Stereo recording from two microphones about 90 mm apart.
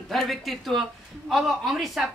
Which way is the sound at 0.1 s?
Centre (ahead or behind).